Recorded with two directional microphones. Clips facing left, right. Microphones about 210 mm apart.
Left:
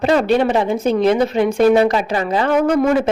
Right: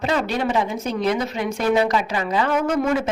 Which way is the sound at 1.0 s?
30° left (ahead or behind).